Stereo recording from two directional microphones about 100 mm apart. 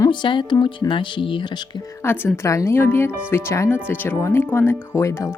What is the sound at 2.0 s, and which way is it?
Speech, 25° left (ahead or behind).